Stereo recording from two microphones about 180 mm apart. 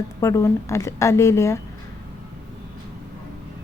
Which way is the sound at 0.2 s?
15° left (ahead or behind).